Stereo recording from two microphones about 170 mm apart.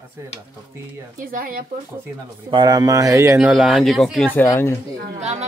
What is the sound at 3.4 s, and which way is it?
Speech, 5° right (ahead or behind).